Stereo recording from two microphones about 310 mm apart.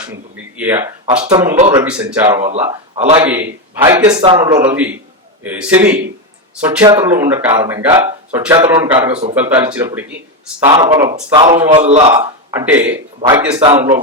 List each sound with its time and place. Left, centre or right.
0.0 s speech: centre
1.5 s mantra: right
1.8 s speech: centre
3.2 s speech: centre
9.3 s speech: centre
11.3 s mantra: right
12.1 s a man's voice: centre
13.6 s speech: centre